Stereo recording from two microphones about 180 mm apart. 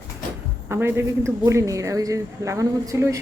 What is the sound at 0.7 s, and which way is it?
A woman's voice, 10° right (ahead or behind).